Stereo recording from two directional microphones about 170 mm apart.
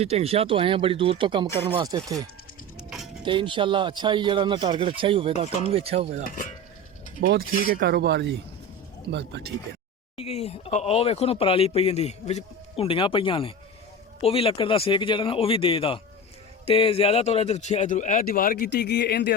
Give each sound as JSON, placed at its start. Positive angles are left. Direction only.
{"t": 0.0, "sound": "speech", "side_deg": -35}
{"t": 3.2, "sound": "speech", "side_deg": -30}
{"t": 6.2, "sound": "speech", "side_deg": 50}
{"t": 7.2, "sound": "speech", "side_deg": -60}
{"t": 10.2, "sound": "speech", "side_deg": 35}